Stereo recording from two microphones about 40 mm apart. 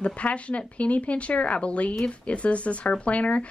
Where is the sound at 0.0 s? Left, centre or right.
Left.